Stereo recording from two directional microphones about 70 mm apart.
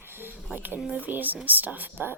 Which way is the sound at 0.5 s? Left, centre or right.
Right.